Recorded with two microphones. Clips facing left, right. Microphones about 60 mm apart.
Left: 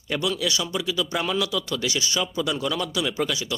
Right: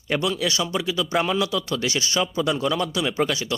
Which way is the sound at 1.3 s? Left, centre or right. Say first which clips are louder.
Right 2 dB; right.